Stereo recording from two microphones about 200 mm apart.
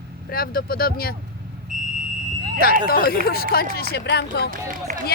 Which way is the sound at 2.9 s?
50° left (ahead or behind).